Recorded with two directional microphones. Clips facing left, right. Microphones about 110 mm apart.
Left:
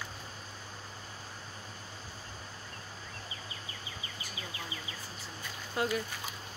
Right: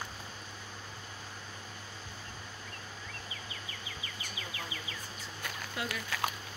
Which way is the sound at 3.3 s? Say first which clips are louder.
Even; 35° left (ahead or behind).